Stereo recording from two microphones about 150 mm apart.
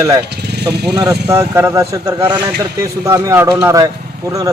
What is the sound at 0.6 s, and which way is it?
Speech, 90° right.